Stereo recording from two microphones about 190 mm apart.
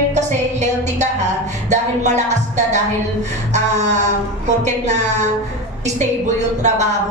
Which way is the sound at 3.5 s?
35° right (ahead or behind).